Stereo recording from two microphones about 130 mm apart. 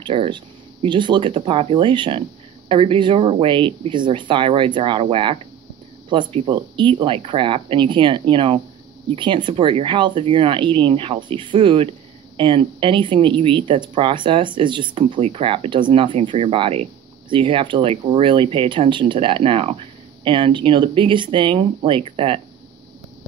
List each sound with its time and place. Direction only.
0.0 s speech: 40° right (ahead or behind)